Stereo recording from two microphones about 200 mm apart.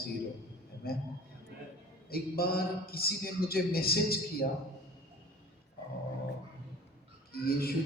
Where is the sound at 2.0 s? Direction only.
50° left (ahead or behind).